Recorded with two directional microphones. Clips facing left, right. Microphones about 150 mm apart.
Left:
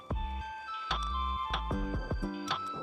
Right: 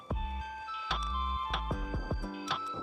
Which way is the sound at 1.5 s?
Centre (ahead or behind).